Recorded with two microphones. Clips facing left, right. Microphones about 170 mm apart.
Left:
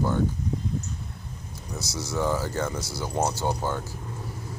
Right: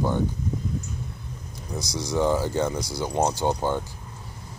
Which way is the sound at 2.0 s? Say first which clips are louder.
Right 4 dB; 15° right (ahead or behind).